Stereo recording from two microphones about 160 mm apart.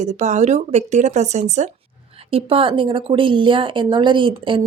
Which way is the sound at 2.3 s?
35° right (ahead or behind).